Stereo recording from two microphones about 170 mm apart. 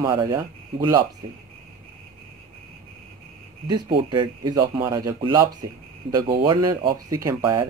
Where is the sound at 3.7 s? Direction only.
25° right (ahead or behind).